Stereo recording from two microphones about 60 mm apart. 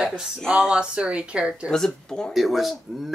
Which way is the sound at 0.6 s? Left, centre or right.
Centre.